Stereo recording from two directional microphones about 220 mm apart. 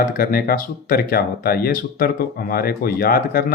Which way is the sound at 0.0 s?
40° left (ahead or behind).